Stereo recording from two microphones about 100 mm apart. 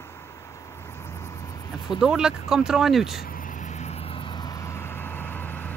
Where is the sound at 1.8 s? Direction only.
5° right (ahead or behind).